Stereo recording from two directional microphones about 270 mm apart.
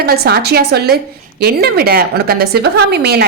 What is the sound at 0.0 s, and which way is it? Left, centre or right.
A woman's voice, right.